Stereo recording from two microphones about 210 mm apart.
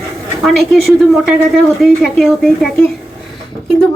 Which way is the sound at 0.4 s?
Centre (ahead or behind).